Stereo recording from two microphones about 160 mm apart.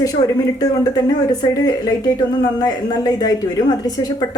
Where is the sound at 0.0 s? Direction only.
20° left (ahead or behind).